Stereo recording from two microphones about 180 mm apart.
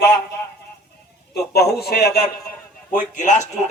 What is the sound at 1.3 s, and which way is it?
Speech, 60° left (ahead or behind).